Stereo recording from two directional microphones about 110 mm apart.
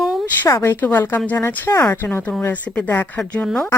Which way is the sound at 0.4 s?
25° left (ahead or behind).